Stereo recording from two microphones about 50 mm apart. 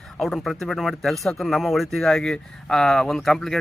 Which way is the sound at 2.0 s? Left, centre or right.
Centre.